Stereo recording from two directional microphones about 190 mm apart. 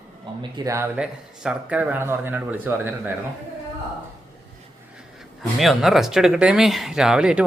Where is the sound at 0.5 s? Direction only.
15° right (ahead or behind).